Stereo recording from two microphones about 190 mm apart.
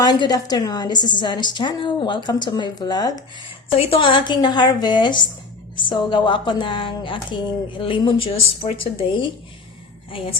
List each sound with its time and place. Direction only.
0.0 s speech: 20° left (ahead or behind)
3.7 s speech: 30° left (ahead or behind)